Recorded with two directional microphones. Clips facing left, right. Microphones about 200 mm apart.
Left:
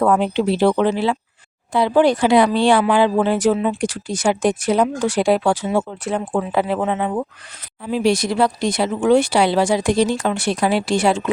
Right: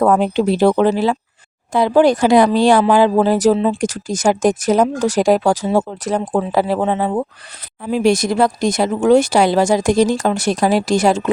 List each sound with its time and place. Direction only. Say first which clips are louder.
0.0 s speech: right 3 dB; 40° right (ahead or behind)
7.9 s speech: right 3 dB; 45° right (ahead or behind)